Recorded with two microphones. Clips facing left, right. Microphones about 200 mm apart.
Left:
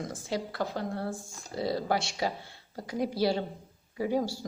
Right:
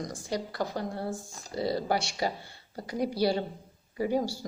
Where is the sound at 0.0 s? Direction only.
5° left (ahead or behind).